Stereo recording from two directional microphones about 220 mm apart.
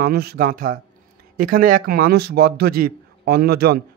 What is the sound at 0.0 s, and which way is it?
A man's voice, 45° right (ahead or behind).